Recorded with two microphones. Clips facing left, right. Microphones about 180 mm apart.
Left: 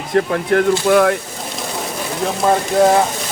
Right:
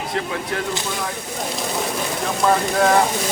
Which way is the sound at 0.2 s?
55° left (ahead or behind).